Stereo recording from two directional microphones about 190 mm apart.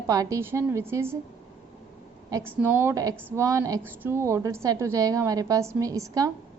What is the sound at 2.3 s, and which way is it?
A woman's voice, 20° right (ahead or behind).